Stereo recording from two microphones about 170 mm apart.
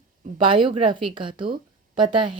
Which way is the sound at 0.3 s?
30° right (ahead or behind).